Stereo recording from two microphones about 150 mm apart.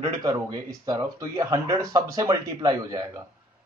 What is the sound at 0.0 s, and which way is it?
Speech, 30° right (ahead or behind).